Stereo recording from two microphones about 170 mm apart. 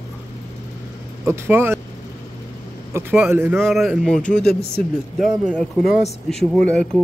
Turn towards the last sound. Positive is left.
turn(degrees=5)  # may be behind; listen again after turning